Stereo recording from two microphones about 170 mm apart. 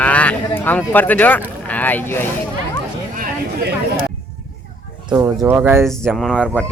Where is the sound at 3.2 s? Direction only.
55° right (ahead or behind).